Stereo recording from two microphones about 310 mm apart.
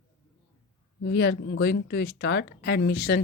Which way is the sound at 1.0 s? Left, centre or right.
Left.